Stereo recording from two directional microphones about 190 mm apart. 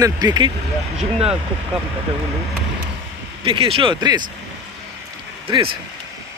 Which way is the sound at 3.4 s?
25° right (ahead or behind).